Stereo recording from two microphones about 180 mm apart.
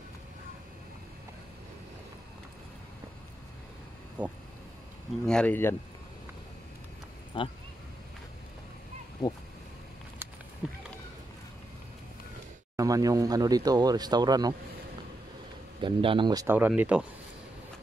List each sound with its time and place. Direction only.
4.2 s speech: 10° right (ahead or behind)
5.2 s speech: 5° left (ahead or behind)
7.3 s speech: 30° left (ahead or behind)
10.6 s run: 5° right (ahead or behind)
12.7 s speech: 20° right (ahead or behind)
15.8 s speech: 30° right (ahead or behind)
16.5 s speech: 10° right (ahead or behind)